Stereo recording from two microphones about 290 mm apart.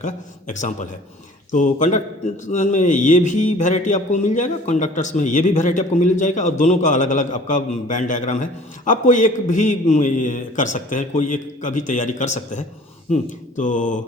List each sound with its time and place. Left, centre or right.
0.0 s a man's voice: left